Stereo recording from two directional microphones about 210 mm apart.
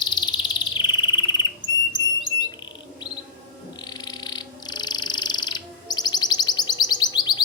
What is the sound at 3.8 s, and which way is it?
Frog, 20° left (ahead or behind).